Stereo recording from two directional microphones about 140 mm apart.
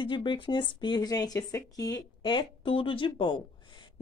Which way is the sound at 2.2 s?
40° left (ahead or behind).